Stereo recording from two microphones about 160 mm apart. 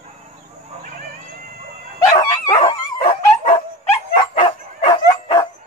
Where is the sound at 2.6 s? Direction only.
35° left (ahead or behind).